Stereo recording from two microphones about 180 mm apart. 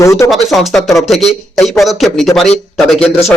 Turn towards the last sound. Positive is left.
turn(degrees=0)  # may be behind; listen again after turning